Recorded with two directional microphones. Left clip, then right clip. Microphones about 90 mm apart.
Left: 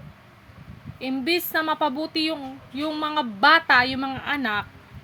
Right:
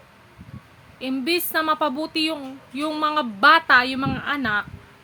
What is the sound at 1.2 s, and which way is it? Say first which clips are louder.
A woman's voice: right 1 dB; 30° right (ahead or behind).